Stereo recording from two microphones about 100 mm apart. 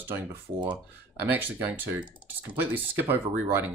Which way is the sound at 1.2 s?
20° right (ahead or behind).